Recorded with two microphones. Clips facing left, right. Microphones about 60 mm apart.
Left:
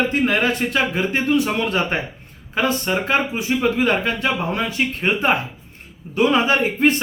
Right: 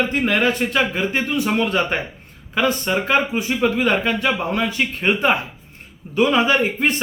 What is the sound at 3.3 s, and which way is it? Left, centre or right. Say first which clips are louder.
A man's voice: even; right.